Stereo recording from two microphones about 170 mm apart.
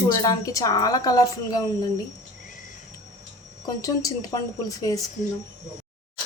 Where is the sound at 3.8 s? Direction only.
20° left (ahead or behind).